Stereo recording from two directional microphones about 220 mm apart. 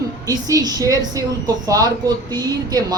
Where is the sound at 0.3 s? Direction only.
15° right (ahead or behind).